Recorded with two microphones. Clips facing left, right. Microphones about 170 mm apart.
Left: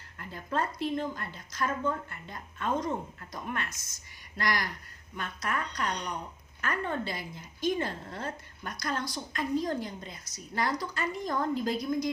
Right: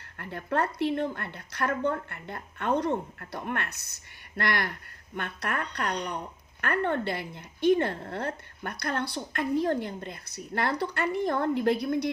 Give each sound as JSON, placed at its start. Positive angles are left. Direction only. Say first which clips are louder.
{"t": 0.2, "sound": "a woman's voice", "louder": "right 4 dB", "side_deg": -65}